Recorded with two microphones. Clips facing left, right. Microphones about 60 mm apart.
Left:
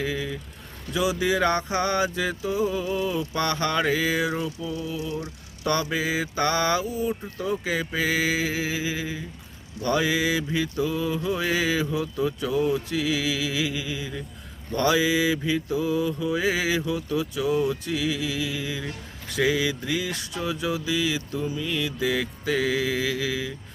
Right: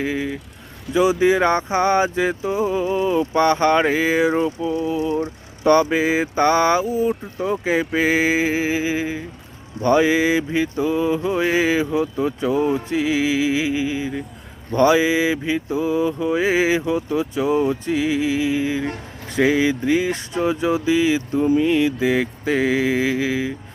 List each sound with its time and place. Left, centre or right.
0.0 s music: right
0.9 s speech: centre
1.2 s music: right